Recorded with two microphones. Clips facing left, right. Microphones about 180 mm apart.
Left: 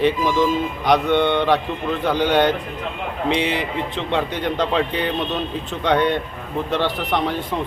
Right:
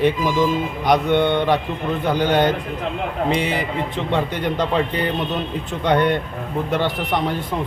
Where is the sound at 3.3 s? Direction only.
45° right (ahead or behind).